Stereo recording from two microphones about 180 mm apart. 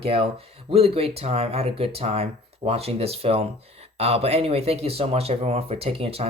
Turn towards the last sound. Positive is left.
turn(degrees=-35)  # may be behind; listen again after turning